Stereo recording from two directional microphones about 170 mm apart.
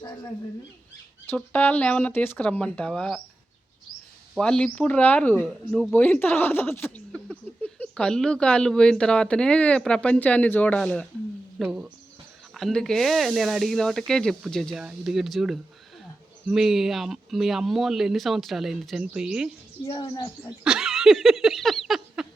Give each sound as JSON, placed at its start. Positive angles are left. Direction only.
{"t": 1.4, "sound": "speech", "side_deg": 10}
{"t": 4.4, "sound": "speech", "side_deg": 5}
{"t": 5.9, "sound": "speech", "side_deg": 10}
{"t": 11.6, "sound": "speech", "side_deg": -5}
{"t": 19.9, "sound": "speech", "side_deg": 25}
{"t": 20.7, "sound": "a sound", "side_deg": -5}